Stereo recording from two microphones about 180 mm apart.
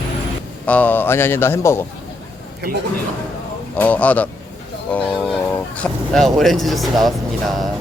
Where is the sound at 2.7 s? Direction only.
50° right (ahead or behind).